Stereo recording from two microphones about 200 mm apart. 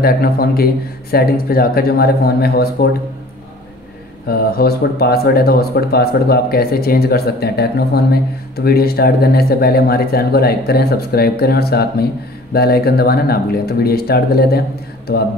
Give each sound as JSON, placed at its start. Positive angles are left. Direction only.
{"t": 0.0, "sound": "speech", "side_deg": 50}
{"t": 4.3, "sound": "speech", "side_deg": 50}